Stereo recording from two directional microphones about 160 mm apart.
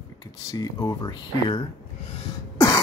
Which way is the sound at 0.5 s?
25° left (ahead or behind).